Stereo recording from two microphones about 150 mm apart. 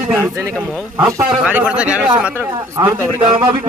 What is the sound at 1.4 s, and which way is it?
Speech, 10° right (ahead or behind).